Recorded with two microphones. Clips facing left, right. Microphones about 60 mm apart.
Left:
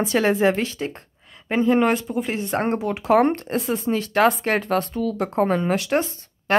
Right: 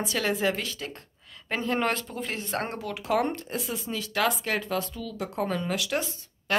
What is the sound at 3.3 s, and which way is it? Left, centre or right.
Speech, left.